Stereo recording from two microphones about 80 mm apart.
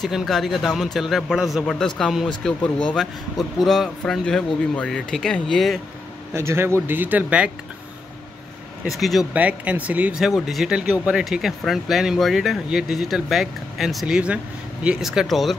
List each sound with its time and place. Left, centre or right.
0.0 s speech: centre
1.7 s speech: centre
4.2 s speech: centre
6.3 s speech: right; by 7.5 s centre
8.8 s speech: centre
9.3 s speech: centre
10.2 s speech: centre
15.0 s speech: centre